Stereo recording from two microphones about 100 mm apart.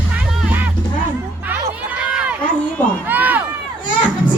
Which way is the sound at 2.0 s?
10° right (ahead or behind).